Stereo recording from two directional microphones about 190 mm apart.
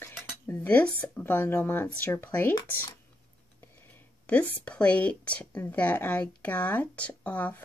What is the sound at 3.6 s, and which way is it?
Speech, 10° left (ahead or behind).